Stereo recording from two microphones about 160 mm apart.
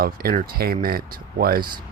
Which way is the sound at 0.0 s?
65° right (ahead or behind).